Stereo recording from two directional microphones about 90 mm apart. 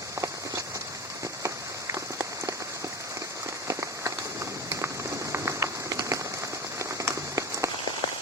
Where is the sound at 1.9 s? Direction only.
35° right (ahead or behind).